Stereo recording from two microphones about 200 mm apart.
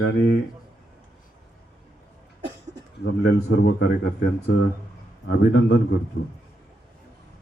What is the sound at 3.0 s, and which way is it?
Speech, 60° left (ahead or behind).